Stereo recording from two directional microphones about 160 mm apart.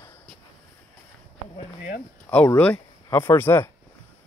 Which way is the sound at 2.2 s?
10° left (ahead or behind).